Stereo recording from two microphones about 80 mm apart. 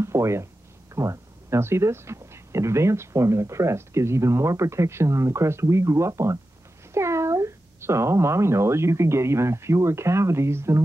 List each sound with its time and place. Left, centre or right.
0.0 s speech: right